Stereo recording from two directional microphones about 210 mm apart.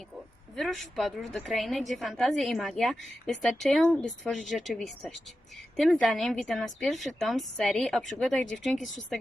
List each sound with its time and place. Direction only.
0.5 s a woman's voice: centre (ahead or behind)